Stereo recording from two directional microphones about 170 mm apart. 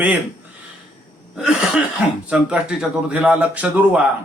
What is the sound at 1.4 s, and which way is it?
Cough, centre (ahead or behind).